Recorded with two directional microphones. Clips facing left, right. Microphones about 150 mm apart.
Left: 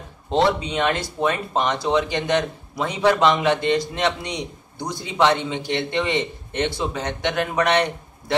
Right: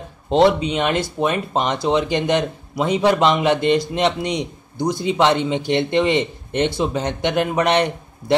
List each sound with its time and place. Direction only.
0.3 s speech: 20° right (ahead or behind)